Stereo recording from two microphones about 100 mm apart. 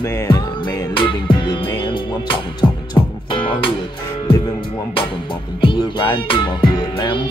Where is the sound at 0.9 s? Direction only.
55° left (ahead or behind).